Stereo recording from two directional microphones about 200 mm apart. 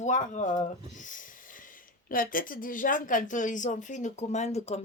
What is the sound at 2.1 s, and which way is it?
Speech, 45° left (ahead or behind).